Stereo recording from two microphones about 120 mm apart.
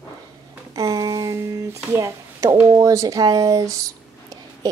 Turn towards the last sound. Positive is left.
turn(degrees=-30)  # may be behind; listen again after turning